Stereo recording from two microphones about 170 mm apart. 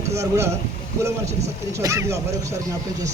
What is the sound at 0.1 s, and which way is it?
Speech, 15° right (ahead or behind).